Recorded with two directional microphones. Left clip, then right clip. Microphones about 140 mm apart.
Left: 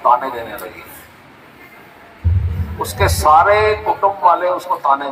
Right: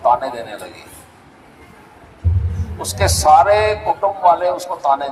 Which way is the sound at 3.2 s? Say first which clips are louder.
Even; 45° right (ahead or behind).